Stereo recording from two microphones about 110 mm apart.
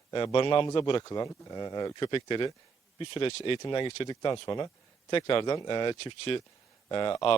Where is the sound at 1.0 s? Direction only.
35° left (ahead or behind).